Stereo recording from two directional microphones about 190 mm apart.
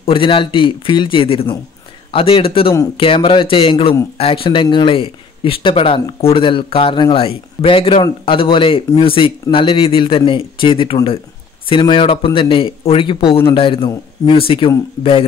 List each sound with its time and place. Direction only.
0.0 s a man's voice: 30° left (ahead or behind)